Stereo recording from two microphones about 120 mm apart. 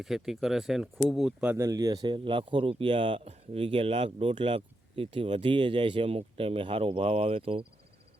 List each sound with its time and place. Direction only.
0.0 s speech: centre (ahead or behind)
1.5 s speech: 30° right (ahead or behind); by 7.6 s 50° right (ahead or behind)